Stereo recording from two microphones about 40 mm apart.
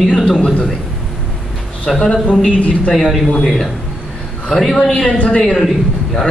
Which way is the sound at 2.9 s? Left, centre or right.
Centre.